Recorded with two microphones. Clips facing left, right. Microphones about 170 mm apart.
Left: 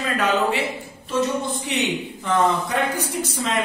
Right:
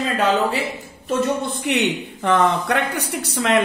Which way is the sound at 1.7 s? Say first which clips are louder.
Right 6 dB; 65° right (ahead or behind).